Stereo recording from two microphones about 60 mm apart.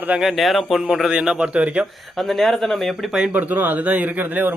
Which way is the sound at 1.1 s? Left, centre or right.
Centre.